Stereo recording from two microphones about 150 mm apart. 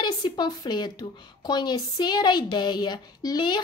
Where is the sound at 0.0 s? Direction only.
30° left (ahead or behind).